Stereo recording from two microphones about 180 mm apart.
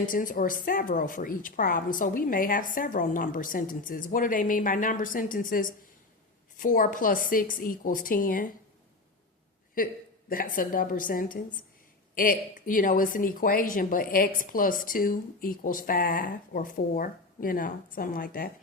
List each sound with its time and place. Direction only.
0.0 s speech: 50° left (ahead or behind)
9.7 s speech: 50° left (ahead or behind)